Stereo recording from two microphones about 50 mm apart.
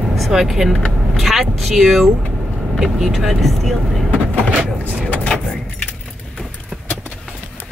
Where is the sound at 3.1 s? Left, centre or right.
Centre.